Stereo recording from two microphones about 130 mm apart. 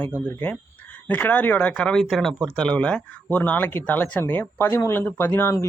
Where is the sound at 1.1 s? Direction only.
10° left (ahead or behind).